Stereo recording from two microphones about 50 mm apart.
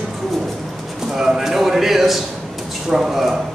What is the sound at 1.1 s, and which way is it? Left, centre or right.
A man's voice, centre.